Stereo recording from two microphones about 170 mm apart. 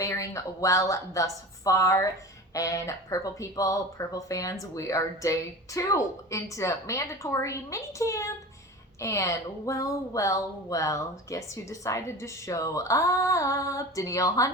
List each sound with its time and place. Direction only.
0.0 s a woman's voice: 20° left (ahead or behind)